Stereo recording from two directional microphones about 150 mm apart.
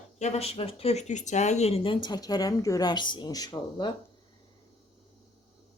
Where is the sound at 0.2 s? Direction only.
45° left (ahead or behind); by 3.9 s 30° left (ahead or behind).